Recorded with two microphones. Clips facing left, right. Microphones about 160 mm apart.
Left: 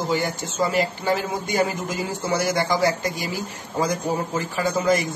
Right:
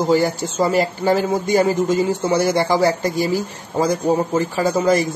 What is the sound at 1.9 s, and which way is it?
A man's voice, 30° right (ahead or behind).